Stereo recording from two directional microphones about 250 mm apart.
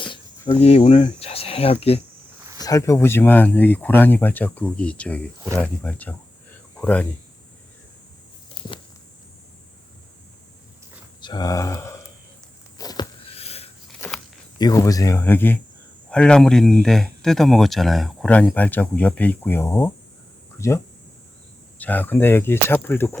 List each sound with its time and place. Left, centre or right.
0.0 s cricket: centre
0.6 s speech: left; by 7.1 s centre
11.2 s speech: centre
12.8 s a sound: centre
14.6 s speech: centre